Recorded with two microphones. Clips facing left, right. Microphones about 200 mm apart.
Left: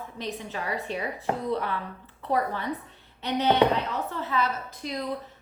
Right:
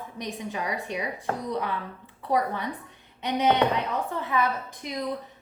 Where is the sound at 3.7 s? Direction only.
15° right (ahead or behind).